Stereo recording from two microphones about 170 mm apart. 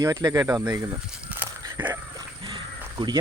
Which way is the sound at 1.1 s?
10° right (ahead or behind).